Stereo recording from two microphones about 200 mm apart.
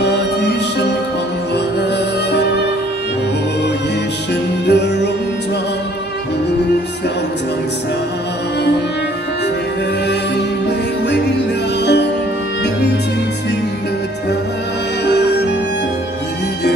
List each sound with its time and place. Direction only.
0.0 s music: 60° left (ahead or behind)
4.6 s music: 60° left (ahead or behind)
11.8 s music: 60° left (ahead or behind)
15.0 s music: 60° left (ahead or behind)